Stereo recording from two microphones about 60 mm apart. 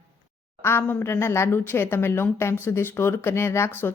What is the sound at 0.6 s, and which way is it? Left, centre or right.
A woman's voice, left.